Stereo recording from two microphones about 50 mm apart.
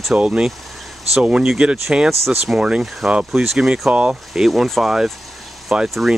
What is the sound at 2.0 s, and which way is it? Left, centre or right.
Speech, centre.